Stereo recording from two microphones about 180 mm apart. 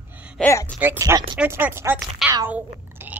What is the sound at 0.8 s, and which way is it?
Speech, 15° right (ahead or behind).